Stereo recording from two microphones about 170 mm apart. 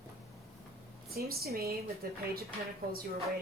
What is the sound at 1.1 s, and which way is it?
A woman's voice, 65° right (ahead or behind).